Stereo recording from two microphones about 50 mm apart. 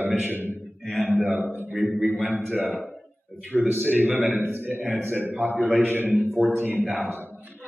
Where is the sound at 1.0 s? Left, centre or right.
Right.